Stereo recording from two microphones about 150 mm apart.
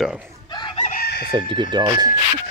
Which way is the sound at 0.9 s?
90° left.